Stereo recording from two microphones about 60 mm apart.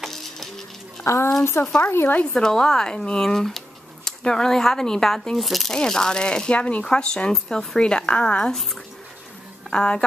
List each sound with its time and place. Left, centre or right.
0.0 s music: centre
1.0 s a child's voice: left
1.4 s speech: left
2.3 s speech: centre
9.7 s speech: centre